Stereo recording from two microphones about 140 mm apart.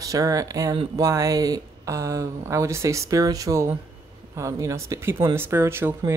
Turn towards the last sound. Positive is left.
turn(degrees=-15)  # may be behind; listen again after turning